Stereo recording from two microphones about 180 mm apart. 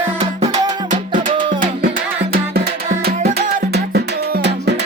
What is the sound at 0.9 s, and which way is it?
Music, 45° right (ahead or behind).